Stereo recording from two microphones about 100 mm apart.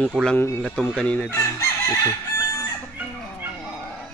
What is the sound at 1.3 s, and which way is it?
Speech, 30° left (ahead or behind).